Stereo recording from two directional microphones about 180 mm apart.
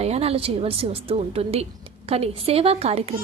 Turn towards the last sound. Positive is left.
turn(degrees=-35)  # may be behind; listen again after turning